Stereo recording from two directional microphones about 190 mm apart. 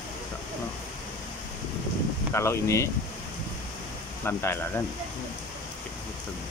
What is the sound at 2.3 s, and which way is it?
Speech, 15° left (ahead or behind).